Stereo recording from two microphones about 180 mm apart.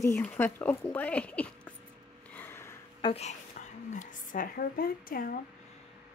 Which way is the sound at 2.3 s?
10° left (ahead or behind).